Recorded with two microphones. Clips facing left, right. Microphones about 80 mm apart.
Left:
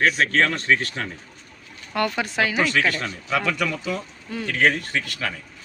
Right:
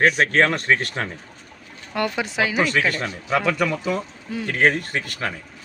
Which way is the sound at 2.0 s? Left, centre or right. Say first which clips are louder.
Even; centre.